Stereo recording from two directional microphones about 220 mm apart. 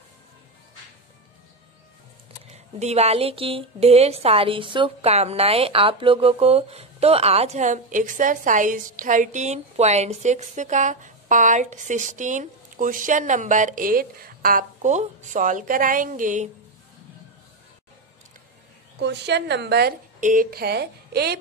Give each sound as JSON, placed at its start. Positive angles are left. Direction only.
{"t": 2.5, "sound": "a woman's voice", "side_deg": -30}
{"t": 18.9, "sound": "a woman's voice", "side_deg": -50}